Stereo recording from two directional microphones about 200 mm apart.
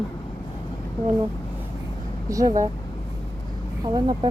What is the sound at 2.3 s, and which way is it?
Speech, 15° right (ahead or behind).